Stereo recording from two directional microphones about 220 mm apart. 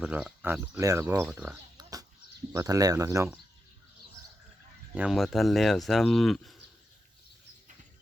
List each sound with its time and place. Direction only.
0.0 s speech: 5° right (ahead or behind)
1.8 s a sound: 15° right (ahead or behind)
2.5 s speech: 15° right (ahead or behind)
4.9 s speech: centre (ahead or behind)